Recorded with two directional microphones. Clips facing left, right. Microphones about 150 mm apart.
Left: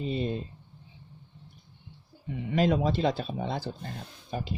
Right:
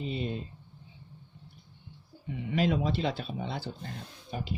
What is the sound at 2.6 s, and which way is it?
Speech, 40° left (ahead or behind).